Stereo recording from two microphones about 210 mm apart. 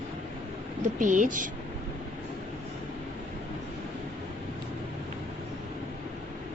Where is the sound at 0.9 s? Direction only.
40° right (ahead or behind).